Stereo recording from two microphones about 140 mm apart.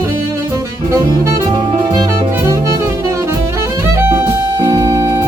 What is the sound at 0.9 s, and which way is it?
Saxophone, 20° right (ahead or behind).